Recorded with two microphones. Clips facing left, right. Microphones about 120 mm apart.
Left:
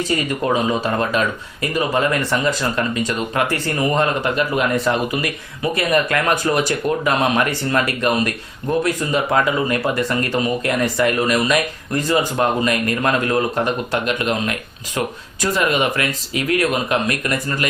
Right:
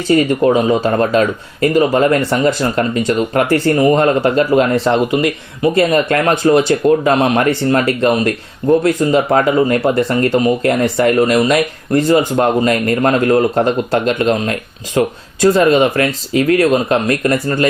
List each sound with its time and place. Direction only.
0.3 s speech: 30° right (ahead or behind)